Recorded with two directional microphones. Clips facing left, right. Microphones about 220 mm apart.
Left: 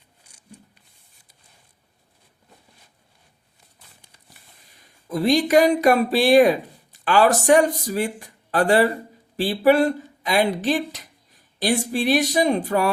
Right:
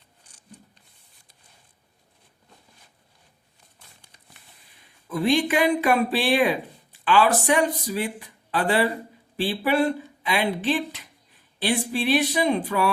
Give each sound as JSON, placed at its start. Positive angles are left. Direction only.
{"t": 5.0, "sound": "speech", "side_deg": 40}